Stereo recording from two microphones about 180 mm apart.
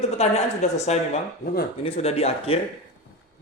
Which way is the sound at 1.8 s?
35° left (ahead or behind).